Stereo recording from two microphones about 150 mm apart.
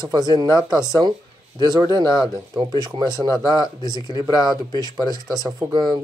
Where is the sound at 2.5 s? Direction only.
30° right (ahead or behind).